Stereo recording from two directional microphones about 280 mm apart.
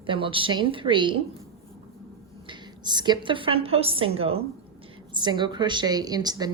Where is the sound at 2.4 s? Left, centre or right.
Centre.